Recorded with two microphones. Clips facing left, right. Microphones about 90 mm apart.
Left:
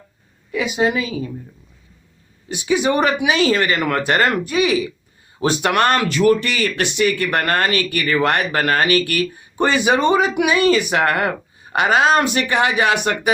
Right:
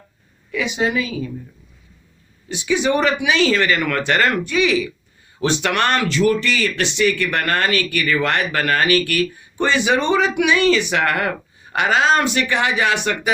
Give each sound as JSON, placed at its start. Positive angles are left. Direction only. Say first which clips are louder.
{"t": 0.5, "sound": "speech", "louder": "left 2 dB", "side_deg": 40}
{"t": 2.5, "sound": "speech", "louder": "left 1 dB", "side_deg": 50}